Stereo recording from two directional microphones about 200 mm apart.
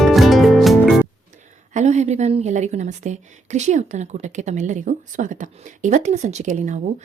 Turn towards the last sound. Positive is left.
turn(degrees=-35)  # may be behind; listen again after turning